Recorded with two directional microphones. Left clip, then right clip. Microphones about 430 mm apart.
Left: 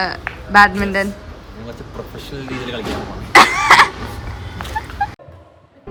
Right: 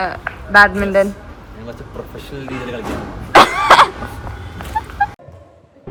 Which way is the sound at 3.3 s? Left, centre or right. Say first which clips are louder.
Even; centre.